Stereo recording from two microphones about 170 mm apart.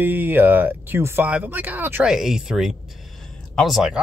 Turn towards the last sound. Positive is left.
turn(degrees=0)  # may be behind; listen again after turning